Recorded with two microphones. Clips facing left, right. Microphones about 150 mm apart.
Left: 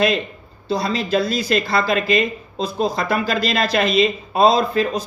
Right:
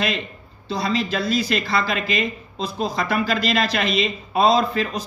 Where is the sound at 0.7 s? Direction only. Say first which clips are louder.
Left 3 dB; 35° left (ahead or behind).